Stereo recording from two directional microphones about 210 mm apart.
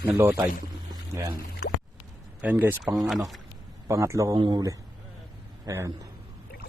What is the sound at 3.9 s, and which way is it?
A man's voice, 15° right (ahead or behind).